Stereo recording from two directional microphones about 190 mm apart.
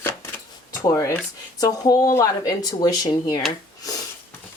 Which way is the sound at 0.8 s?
15° left (ahead or behind).